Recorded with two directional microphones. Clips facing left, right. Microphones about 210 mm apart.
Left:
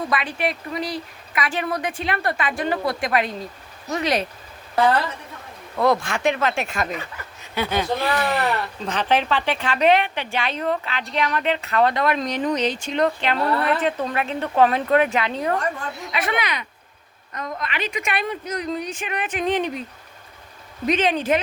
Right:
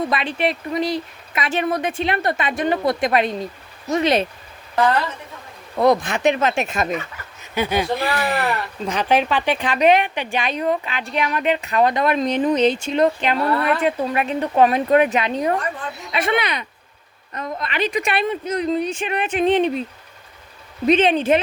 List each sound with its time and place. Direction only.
0.1 s speech: 25° right (ahead or behind)
5.7 s speech: 20° right (ahead or behind)
13.0 s speech: 15° right (ahead or behind)
20.8 s speech: 25° right (ahead or behind)